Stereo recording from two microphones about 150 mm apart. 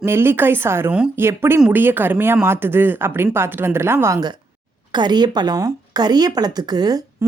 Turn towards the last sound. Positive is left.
turn(degrees=-25)  # may be behind; listen again after turning